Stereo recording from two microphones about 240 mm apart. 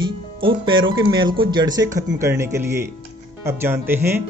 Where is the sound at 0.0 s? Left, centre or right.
Right.